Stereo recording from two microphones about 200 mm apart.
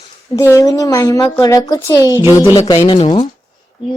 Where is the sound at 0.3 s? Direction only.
15° left (ahead or behind).